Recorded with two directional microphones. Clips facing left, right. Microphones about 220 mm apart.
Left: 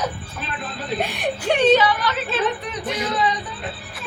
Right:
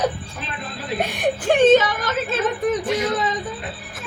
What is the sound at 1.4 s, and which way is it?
Speech, 45° right (ahead or behind).